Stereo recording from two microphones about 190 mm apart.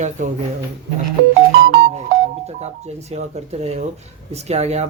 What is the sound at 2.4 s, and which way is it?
Speech, 35° right (ahead or behind).